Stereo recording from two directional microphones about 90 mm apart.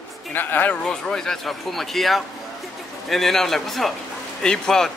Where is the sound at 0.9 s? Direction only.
5° left (ahead or behind).